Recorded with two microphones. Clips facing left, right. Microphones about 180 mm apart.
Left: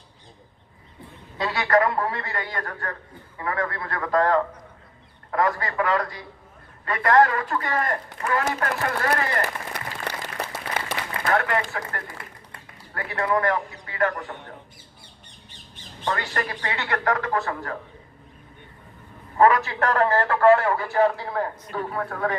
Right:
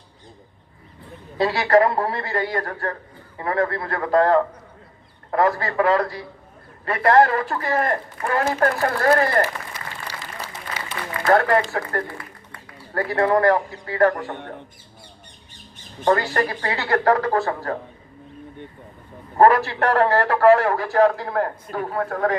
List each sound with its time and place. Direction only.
1.4 s a man's voice: 30° right (ahead or behind)
9.7 s applause: 60° left (ahead or behind)
11.3 s a man's voice: 35° right (ahead or behind)
16.0 s a man's voice: 35° right (ahead or behind)
19.4 s a man's voice: 35° right (ahead or behind)